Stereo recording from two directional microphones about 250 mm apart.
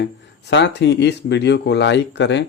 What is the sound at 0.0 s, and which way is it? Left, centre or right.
A man's voice, left.